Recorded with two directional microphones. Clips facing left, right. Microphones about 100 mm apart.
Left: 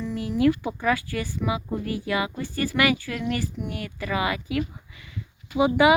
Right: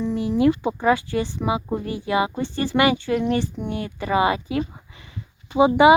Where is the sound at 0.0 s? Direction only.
20° right (ahead or behind).